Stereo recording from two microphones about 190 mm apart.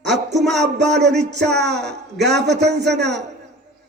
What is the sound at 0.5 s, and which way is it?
A man's voice, 65° right (ahead or behind).